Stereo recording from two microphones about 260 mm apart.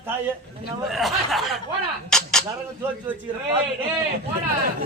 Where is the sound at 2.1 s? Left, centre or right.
Centre.